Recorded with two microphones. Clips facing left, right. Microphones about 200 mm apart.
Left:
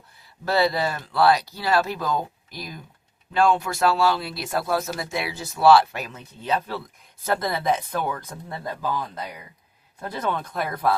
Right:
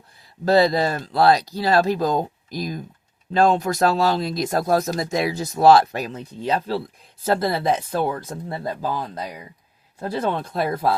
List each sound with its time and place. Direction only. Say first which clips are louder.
0.4 s speech: right 5 dB; 40° right (ahead or behind)